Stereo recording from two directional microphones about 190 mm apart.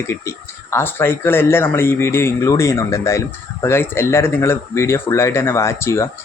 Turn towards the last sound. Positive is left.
turn(degrees=15)  # may be behind; listen again after turning